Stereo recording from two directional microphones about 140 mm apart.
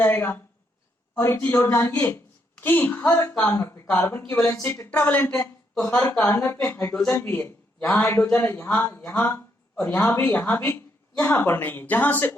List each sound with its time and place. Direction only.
0.0 s speech: 15° left (ahead or behind)
6.9 s speech: 5° left (ahead or behind)